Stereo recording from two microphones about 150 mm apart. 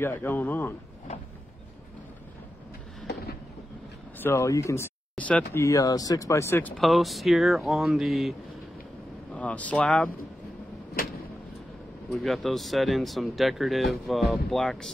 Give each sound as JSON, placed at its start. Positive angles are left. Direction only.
{"t": 0.0, "sound": "speech", "side_deg": 15}
{"t": 4.2, "sound": "speech", "side_deg": 15}
{"t": 5.1, "sound": "speech", "side_deg": 10}
{"t": 6.8, "sound": "speech", "side_deg": 0}
{"t": 12.1, "sound": "speech", "side_deg": 0}